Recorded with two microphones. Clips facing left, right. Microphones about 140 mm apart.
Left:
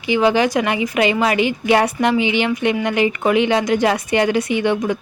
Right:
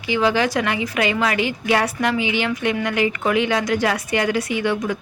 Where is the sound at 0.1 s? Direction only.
20° left (ahead or behind).